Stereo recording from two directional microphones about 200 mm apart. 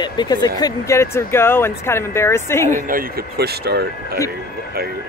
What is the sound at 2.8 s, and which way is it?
Speech, 45° right (ahead or behind).